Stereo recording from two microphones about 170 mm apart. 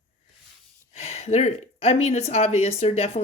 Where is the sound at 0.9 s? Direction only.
40° left (ahead or behind).